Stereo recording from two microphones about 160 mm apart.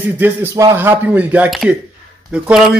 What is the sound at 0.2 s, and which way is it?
Speech, 15° right (ahead or behind).